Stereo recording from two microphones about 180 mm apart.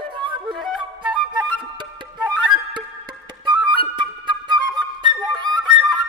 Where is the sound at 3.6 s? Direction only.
25° right (ahead or behind).